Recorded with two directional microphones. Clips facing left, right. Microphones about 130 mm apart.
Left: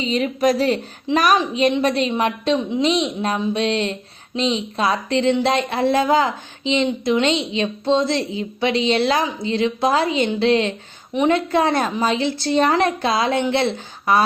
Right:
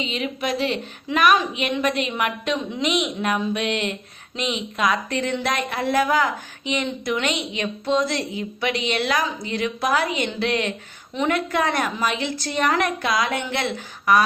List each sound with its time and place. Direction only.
0.0 s speech: 40° left (ahead or behind)